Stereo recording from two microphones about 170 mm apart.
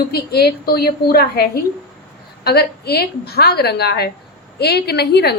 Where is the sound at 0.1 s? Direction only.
70° left (ahead or behind).